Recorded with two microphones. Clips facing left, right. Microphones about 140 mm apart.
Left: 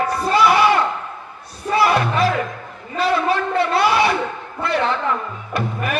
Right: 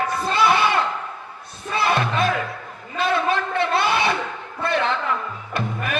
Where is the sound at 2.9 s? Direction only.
20° right (ahead or behind).